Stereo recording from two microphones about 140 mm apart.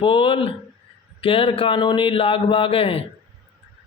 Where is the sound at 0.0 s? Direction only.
40° left (ahead or behind).